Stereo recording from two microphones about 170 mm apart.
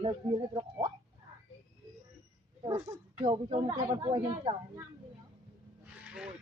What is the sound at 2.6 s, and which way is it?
Speech, 25° right (ahead or behind).